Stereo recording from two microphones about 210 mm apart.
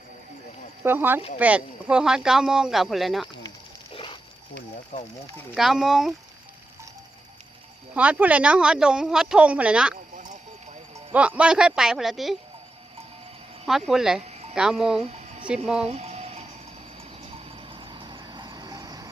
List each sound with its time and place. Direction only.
0.9 s a woman's voice: 10° right (ahead or behind)
3.9 s pig: 25° left (ahead or behind)
4.5 s a sound: 35° left (ahead or behind)
5.5 s a woman's voice: centre (ahead or behind)
7.9 s a woman's voice: 5° right (ahead or behind)
11.1 s a woman's voice: 5° right (ahead or behind)
13.7 s a woman's voice: centre (ahead or behind)
14.3 s music: 30° right (ahead or behind)
14.5 s a woman's voice: 5° right (ahead or behind)
15.0 s a sound: 30° right (ahead or behind)
15.4 s a woman's voice: 5° right (ahead or behind)
15.9 s music: 30° right (ahead or behind)
17.0 s vehicle: 30° right (ahead or behind)